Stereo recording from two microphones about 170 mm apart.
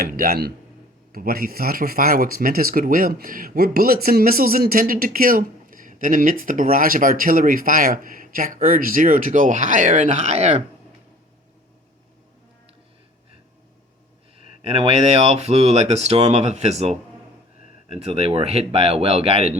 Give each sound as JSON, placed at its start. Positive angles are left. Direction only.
{"t": 0.0, "sound": "speech", "side_deg": -65}
{"t": 14.6, "sound": "speech", "side_deg": -35}